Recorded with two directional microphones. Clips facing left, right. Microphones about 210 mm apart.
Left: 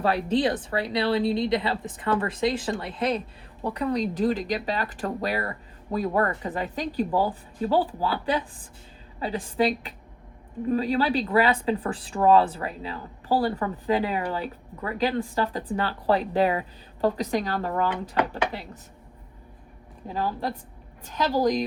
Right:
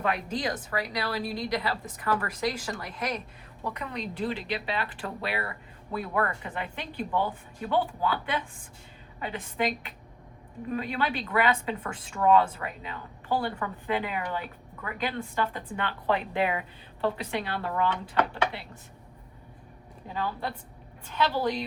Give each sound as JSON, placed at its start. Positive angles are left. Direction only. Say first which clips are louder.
{"t": 0.0, "sound": "speech", "louder": "left 7 dB", "side_deg": 35}
{"t": 20.1, "sound": "speech", "louder": "left 4 dB", "side_deg": 40}